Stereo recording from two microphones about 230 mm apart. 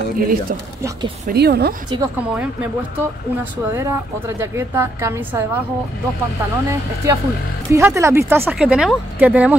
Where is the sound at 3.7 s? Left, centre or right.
Centre.